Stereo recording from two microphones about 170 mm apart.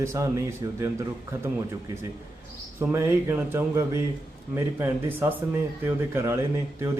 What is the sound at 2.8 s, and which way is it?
Speech, 15° right (ahead or behind).